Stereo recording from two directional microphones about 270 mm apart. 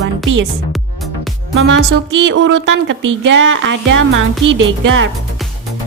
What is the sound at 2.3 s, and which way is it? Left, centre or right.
Speech, right.